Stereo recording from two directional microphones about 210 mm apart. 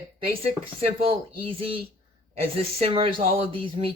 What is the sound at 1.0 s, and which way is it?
Speech, 25° right (ahead or behind).